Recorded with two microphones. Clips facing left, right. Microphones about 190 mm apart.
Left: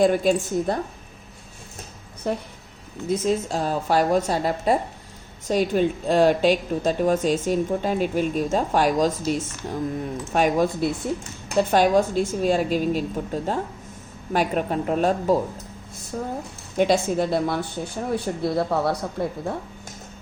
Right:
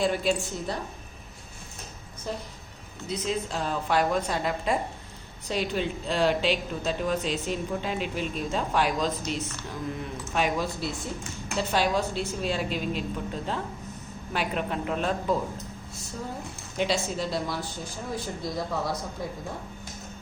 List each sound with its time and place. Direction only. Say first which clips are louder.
0.0 s a woman's voice: left 7 dB; 50° left (ahead or behind)
2.3 s speech: left 8 dB; 60° left (ahead or behind)
3.1 s a woman's voice: left 7 dB; 45° left (ahead or behind); by 19.3 s 65° left (ahead or behind)